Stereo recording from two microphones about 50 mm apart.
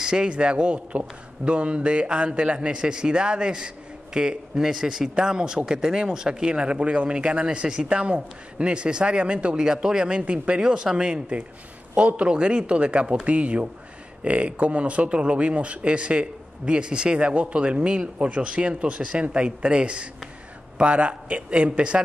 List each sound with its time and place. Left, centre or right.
0.0 s speech: centre